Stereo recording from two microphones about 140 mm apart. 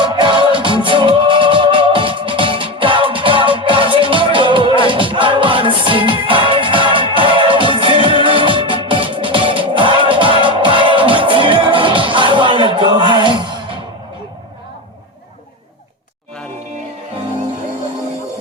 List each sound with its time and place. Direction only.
0.0 s music: 35° right (ahead or behind)